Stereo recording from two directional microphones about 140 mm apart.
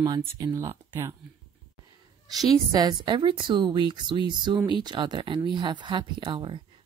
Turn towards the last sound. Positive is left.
turn(degrees=-35)  # may be behind; listen again after turning